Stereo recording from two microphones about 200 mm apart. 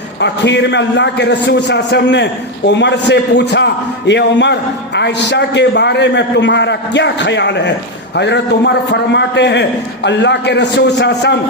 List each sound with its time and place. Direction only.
0.2 s a man's voice: 60° left (ahead or behind)